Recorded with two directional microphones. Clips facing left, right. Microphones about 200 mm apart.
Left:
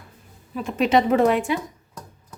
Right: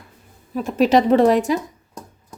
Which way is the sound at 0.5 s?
40° right (ahead or behind).